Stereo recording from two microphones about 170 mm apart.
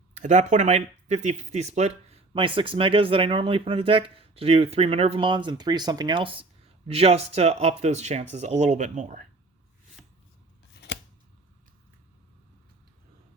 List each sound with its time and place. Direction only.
0.1 s speech: 45° right (ahead or behind)